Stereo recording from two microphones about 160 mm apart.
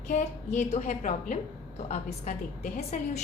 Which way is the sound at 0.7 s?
50° left (ahead or behind).